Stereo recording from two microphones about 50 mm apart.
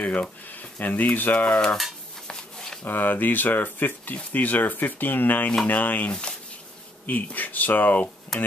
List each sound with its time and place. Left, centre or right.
0.0 s speech: left
1.5 s speech: centre
2.2 s a sound: centre
2.8 s speech: left
8.3 s speech: centre